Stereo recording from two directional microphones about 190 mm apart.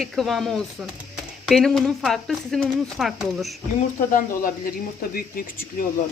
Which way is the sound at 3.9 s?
45° left (ahead or behind).